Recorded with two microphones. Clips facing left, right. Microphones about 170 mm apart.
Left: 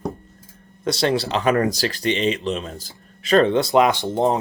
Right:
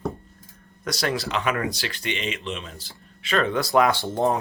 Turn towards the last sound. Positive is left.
turn(degrees=20)  # may be behind; listen again after turning